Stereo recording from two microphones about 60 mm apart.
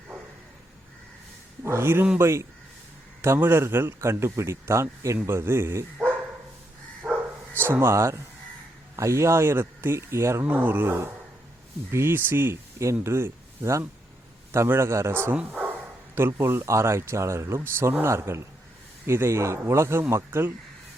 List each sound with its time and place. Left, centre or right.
1.6 s speech: right
7.1 s bow-wow: centre
7.5 s speech: right
10.4 s speech: right
17.6 s speech: right